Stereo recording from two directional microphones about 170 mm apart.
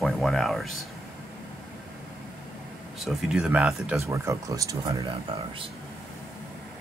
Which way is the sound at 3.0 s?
5° right (ahead or behind).